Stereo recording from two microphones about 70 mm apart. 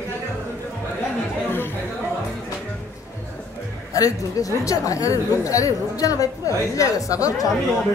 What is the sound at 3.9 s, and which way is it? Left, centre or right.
A woman's voice, left.